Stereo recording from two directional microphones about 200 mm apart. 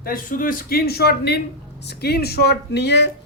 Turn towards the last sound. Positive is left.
turn(degrees=60)  # may be behind; listen again after turning